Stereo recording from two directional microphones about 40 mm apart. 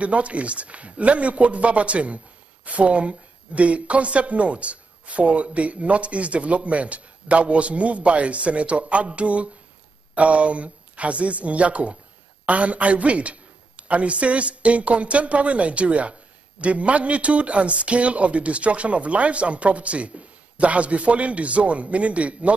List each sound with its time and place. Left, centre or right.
0.0 s a man's voice: right